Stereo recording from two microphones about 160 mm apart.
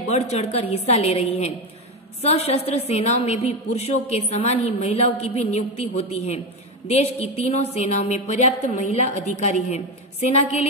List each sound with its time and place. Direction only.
0.0 s a woman's voice: 45° left (ahead or behind)